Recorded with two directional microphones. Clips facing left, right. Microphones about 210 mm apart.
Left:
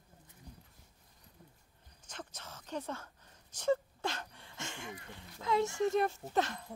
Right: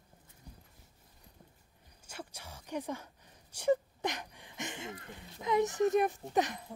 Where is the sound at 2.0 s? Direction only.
10° right (ahead or behind).